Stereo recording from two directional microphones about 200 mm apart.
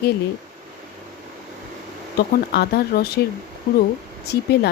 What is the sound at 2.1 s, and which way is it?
Speech, 50° left (ahead or behind).